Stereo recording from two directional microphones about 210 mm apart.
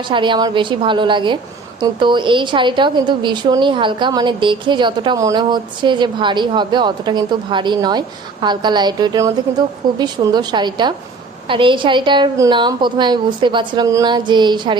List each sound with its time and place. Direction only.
0.1 s a woman's voice: 20° right (ahead or behind)